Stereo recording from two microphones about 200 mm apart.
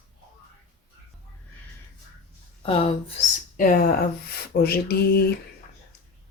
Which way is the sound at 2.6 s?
30° left (ahead or behind).